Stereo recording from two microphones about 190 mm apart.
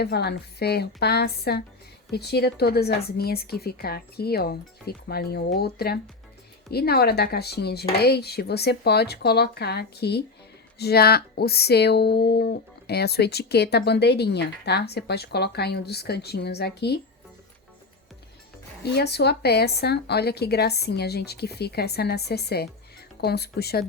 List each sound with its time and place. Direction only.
0.0 s speech: 60° left (ahead or behind)
18.8 s speech: 60° left (ahead or behind)